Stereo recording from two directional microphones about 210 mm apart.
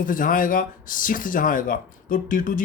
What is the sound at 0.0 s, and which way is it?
Speech, 40° left (ahead or behind).